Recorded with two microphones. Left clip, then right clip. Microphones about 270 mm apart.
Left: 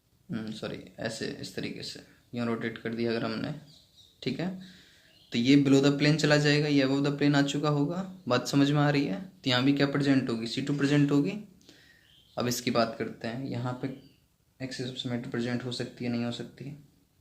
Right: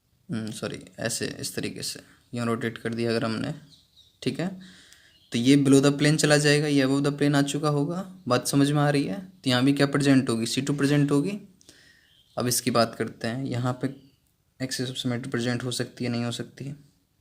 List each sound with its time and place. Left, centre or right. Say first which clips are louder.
0.3 s speech: right 4 dB; right